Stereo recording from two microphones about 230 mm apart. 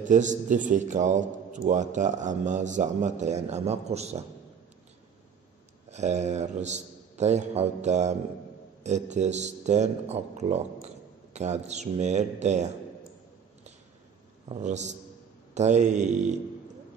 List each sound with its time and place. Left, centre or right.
0.0 s a man's voice: right
5.9 s a man's voice: right
14.5 s a man's voice: right